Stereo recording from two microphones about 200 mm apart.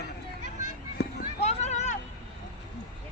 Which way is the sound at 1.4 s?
35° left (ahead or behind).